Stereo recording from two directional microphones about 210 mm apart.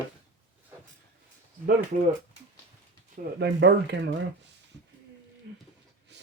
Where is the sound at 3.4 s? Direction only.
55° right (ahead or behind).